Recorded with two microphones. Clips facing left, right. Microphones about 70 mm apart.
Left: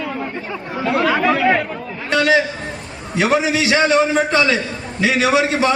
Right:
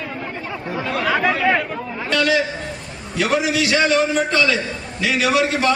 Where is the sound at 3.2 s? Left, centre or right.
Left.